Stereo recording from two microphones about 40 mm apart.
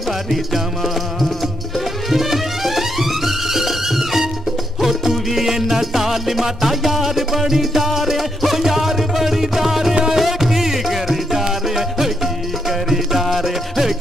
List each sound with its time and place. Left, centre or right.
0.3 s music: centre